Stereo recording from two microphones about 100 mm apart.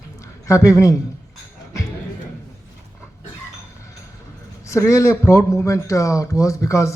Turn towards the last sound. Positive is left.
turn(degrees=30)  # may be behind; listen again after turning